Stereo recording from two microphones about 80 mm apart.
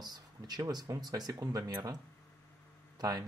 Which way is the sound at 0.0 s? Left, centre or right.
Right.